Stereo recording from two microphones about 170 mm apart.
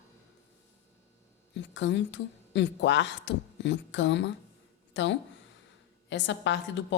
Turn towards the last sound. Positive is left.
turn(degrees=90)